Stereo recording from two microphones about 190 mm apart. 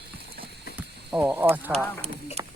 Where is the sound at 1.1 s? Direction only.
5° right (ahead or behind).